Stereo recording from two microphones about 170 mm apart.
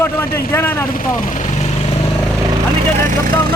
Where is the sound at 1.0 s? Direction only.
50° left (ahead or behind).